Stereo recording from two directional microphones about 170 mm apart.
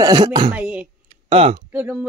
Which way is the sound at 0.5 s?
10° right (ahead or behind).